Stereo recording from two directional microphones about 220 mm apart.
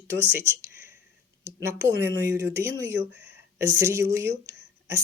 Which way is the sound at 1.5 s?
15° right (ahead or behind).